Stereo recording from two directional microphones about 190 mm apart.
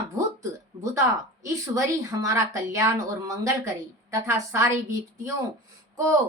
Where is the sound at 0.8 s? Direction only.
15° right (ahead or behind).